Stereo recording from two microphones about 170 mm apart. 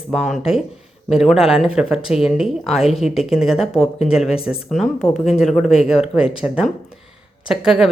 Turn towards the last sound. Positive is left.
turn(degrees=-5)  # may be behind; listen again after turning